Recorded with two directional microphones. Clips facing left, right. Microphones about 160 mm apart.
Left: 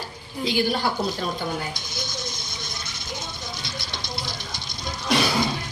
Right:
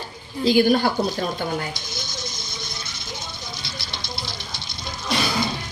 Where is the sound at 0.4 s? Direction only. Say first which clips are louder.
Right 7 dB; 50° right (ahead or behind).